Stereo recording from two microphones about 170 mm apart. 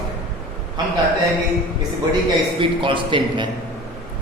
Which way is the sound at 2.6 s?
30° right (ahead or behind).